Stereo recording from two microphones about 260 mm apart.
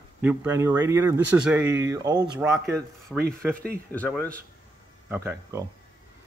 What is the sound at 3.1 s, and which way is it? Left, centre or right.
Speech, centre.